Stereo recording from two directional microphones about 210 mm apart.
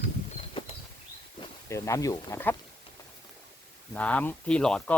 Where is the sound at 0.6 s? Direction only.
25° left (ahead or behind).